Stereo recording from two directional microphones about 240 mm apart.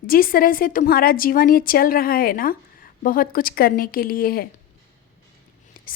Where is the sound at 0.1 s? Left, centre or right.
Left.